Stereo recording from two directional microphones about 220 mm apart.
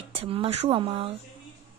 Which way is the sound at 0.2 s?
25° right (ahead or behind).